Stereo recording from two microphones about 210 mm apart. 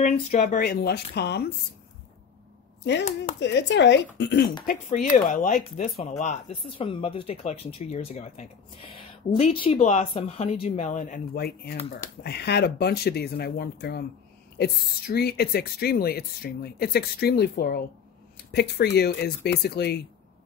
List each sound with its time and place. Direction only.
0.0 s speech: 35° left (ahead or behind); by 1.5 s 50° left (ahead or behind)
2.8 s speech: 55° left (ahead or behind)
5.1 s speech: 40° left (ahead or behind)